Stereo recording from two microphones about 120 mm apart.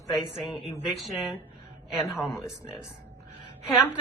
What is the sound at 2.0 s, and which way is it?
Speech, 20° left (ahead or behind).